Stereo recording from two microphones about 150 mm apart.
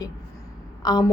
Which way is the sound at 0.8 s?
25° left (ahead or behind).